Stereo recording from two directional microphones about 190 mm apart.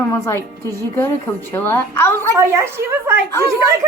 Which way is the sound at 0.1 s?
15° left (ahead or behind).